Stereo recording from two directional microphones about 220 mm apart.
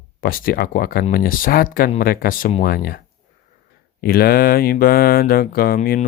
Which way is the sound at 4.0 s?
45° left (ahead or behind).